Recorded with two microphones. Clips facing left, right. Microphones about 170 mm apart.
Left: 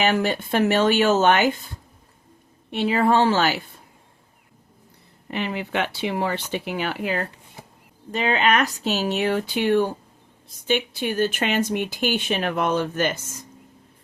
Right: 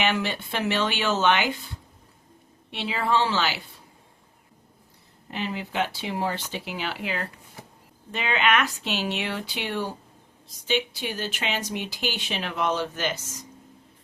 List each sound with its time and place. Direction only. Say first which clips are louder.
0.0 s speech: left 5 dB; 45° left (ahead or behind)
2.6 s speech: left 7 dB; 50° left (ahead or behind)
5.3 s speech: left 4 dB; 65° left (ahead or behind)